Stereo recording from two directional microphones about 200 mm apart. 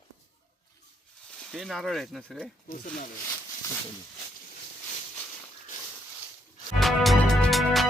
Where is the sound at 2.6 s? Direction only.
40° left (ahead or behind).